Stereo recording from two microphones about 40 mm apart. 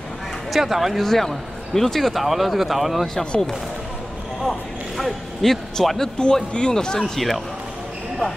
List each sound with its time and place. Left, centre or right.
0.5 s speech: centre
1.0 s speech: centre
4.4 s speech: centre
6.1 s speech: left
7.0 s speech: centre